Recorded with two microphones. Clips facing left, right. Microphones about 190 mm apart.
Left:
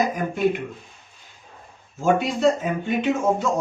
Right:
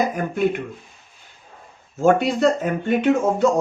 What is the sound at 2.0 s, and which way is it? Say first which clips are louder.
Speech: right 3 dB; 60° right (ahead or behind).